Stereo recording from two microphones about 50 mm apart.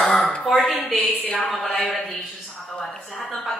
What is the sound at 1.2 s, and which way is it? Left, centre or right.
Speech, left.